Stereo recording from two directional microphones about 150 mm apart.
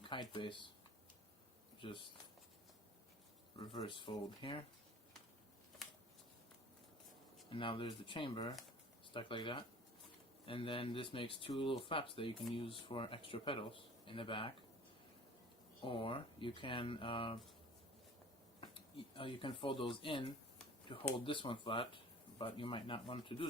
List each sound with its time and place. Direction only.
0.0 s speech: 35° left (ahead or behind)
1.8 s speech: 35° left (ahead or behind)
3.6 s speech: 30° left (ahead or behind)
7.5 s speech: 35° left (ahead or behind)
15.8 s speech: 35° left (ahead or behind)
18.6 s speech: 35° left (ahead or behind)